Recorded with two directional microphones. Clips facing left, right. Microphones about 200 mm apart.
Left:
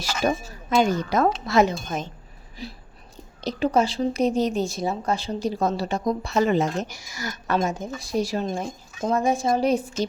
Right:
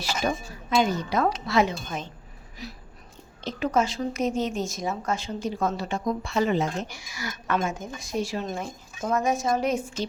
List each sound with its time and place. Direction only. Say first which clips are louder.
0.8 s a woman's voice: left 3 dB; 45° left (ahead or behind)
2.6 s a woman's voice: left 3 dB; 30° left (ahead or behind)